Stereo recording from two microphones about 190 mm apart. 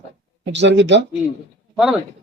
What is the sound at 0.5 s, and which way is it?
Speech, 65° right (ahead or behind).